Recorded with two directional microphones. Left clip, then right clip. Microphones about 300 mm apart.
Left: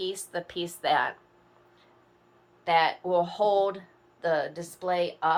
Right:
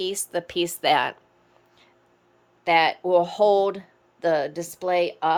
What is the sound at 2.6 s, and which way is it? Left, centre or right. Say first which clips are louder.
A woman's voice: right 4 dB; right.